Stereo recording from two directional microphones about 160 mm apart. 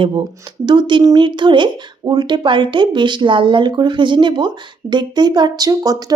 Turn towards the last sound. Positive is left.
turn(degrees=-25)  # may be behind; listen again after turning